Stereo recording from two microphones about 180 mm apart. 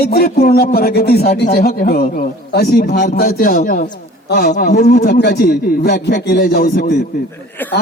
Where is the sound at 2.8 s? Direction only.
45° left (ahead or behind).